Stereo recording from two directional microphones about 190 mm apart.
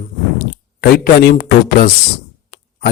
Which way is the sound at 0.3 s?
60° left (ahead or behind).